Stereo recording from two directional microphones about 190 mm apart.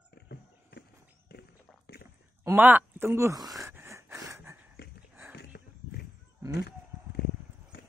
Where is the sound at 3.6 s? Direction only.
15° right (ahead or behind).